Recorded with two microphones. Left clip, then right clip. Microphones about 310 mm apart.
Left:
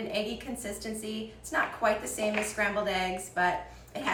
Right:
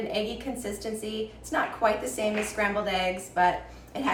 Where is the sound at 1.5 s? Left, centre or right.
Centre.